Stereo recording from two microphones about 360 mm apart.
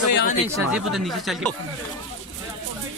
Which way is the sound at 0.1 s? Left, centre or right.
Left.